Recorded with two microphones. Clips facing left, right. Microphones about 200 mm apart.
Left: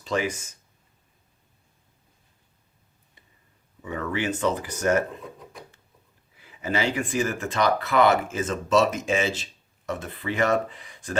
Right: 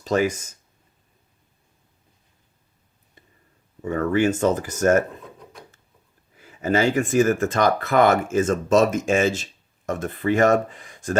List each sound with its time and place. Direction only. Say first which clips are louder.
0.0 s speech: right 6 dB; 40° right (ahead or behind)
3.8 s speech: right 8 dB; 45° right (ahead or behind)
6.3 s speech: right 6 dB; 45° right (ahead or behind)